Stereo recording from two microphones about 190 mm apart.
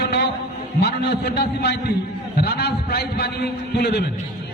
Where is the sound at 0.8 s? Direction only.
60° left (ahead or behind).